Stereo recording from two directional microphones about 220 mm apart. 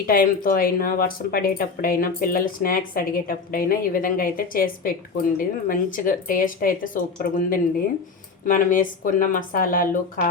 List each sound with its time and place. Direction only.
0.1 s speech: 40° left (ahead or behind)